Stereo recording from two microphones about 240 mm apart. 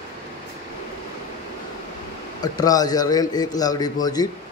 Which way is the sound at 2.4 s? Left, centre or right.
Centre.